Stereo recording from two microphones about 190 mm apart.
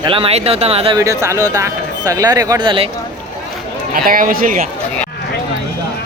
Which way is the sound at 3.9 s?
45° right (ahead or behind).